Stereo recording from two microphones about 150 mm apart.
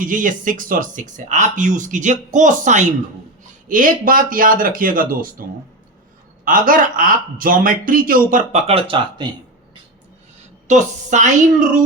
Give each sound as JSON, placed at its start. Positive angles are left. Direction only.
{"t": 0.0, "sound": "speech", "side_deg": -60}
{"t": 3.7, "sound": "speech", "side_deg": -65}
{"t": 6.4, "sound": "speech", "side_deg": -65}
{"t": 8.5, "sound": "speech", "side_deg": -40}
{"t": 10.7, "sound": "speech", "side_deg": -55}